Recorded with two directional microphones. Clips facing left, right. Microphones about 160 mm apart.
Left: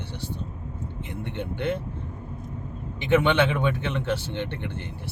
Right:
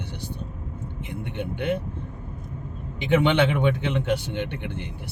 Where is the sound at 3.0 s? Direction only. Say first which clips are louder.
Right 1 dB; 15° right (ahead or behind).